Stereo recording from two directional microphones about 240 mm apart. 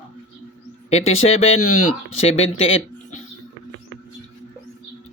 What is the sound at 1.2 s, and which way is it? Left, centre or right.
Speech, left.